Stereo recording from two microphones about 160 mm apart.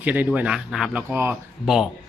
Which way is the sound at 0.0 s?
10° right (ahead or behind).